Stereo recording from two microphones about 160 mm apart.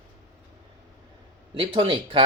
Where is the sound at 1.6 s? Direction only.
30° right (ahead or behind).